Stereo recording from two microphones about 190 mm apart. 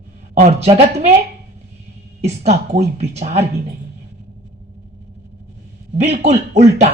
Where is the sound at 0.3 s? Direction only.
40° right (ahead or behind).